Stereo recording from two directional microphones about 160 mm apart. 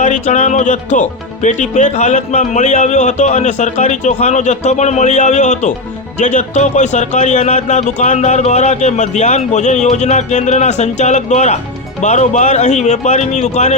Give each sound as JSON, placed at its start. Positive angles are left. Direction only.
{"t": 0.0, "sound": "speech", "side_deg": 50}